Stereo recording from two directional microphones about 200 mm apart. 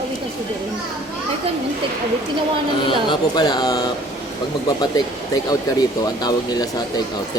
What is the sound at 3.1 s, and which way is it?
Speech, 20° left (ahead or behind).